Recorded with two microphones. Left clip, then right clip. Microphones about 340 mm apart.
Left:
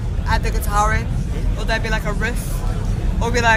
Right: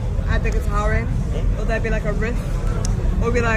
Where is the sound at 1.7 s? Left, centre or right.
Left.